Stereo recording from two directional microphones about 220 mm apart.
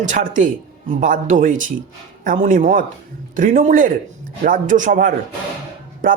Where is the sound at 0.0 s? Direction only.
35° right (ahead or behind).